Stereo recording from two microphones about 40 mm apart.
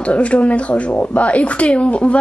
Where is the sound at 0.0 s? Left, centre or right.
Left.